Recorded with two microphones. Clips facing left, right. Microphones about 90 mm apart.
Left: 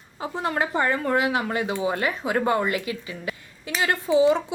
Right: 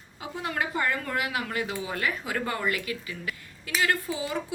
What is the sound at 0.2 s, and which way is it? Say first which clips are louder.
Speech: left 5 dB; 35° left (ahead or behind).